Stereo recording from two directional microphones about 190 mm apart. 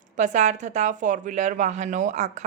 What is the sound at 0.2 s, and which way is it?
A woman's voice, 40° right (ahead or behind).